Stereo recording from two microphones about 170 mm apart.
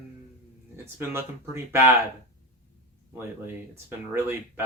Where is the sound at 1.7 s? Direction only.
15° right (ahead or behind).